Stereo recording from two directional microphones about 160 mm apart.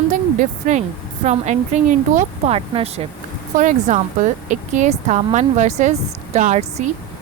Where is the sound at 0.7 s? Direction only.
45° right (ahead or behind).